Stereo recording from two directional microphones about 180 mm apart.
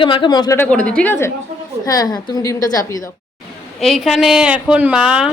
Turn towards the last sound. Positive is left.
turn(degrees=-5)  # may be behind; listen again after turning